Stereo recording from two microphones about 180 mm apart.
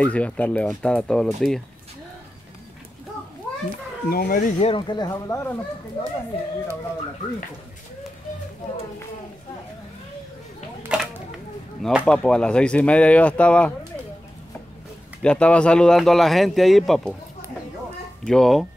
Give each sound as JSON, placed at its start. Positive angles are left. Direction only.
{"t": 0.0, "sound": "speech", "side_deg": 5}
{"t": 4.1, "sound": "speech", "side_deg": 55}
{"t": 4.6, "sound": "speech", "side_deg": 30}
{"t": 10.9, "sound": "a sound", "side_deg": -5}
{"t": 11.8, "sound": "speech", "side_deg": 0}
{"t": 15.2, "sound": "speech", "side_deg": 5}
{"t": 18.2, "sound": "speech", "side_deg": 0}